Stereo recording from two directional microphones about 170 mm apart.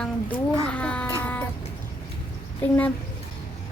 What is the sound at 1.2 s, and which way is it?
Music, 10° left (ahead or behind).